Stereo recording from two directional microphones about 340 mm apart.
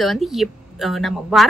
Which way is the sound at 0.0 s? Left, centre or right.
Centre.